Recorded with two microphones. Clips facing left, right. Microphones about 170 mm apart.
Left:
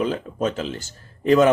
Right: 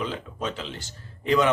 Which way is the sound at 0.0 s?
45° left (ahead or behind).